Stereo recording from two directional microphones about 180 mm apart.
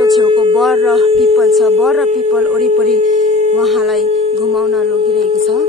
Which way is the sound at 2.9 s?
40° right (ahead or behind).